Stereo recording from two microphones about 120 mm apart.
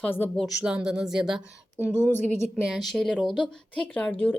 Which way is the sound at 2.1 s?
70° right (ahead or behind).